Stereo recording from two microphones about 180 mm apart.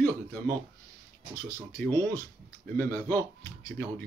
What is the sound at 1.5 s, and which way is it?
Speech, 15° left (ahead or behind).